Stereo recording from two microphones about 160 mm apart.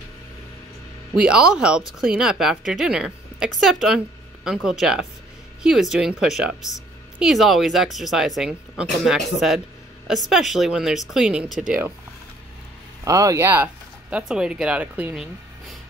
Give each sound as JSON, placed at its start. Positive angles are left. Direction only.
{"t": 1.1, "sound": "a woman's voice", "side_deg": -5}
{"t": 13.0, "sound": "speech", "side_deg": -20}
{"t": 14.1, "sound": "a woman's voice", "side_deg": -5}